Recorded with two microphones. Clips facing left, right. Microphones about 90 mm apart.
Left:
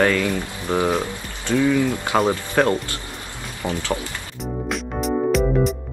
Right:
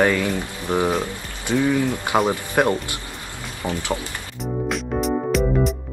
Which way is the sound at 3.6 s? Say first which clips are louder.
Left 1 dB; 20° left (ahead or behind).